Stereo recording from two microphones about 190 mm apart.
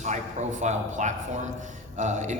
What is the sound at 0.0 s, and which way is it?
A man's voice, 40° right (ahead or behind).